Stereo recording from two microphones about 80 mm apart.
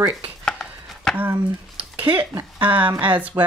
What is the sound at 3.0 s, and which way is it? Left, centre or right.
Speech, right.